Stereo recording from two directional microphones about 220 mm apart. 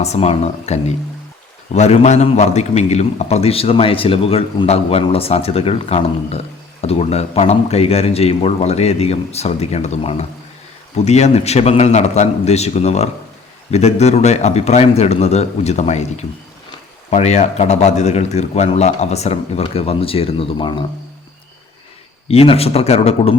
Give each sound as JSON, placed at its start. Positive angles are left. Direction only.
{"t": 0.0, "sound": "a man's voice", "side_deg": 30}
{"t": 22.3, "sound": "a man's voice", "side_deg": 25}